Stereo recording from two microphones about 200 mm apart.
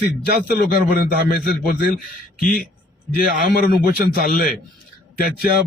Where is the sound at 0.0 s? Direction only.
45° left (ahead or behind).